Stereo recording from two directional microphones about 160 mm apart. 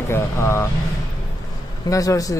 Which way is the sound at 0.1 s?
15° left (ahead or behind).